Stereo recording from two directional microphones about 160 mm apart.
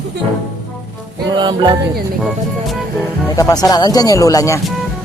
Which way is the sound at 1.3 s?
25° right (ahead or behind).